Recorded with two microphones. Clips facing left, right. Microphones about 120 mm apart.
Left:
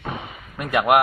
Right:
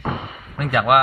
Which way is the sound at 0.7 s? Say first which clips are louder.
Right 1 dB; 15° left (ahead or behind).